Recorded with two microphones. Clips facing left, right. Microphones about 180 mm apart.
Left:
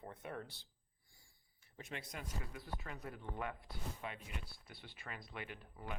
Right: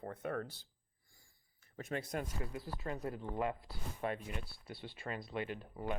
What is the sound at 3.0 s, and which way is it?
Speech, 25° right (ahead or behind).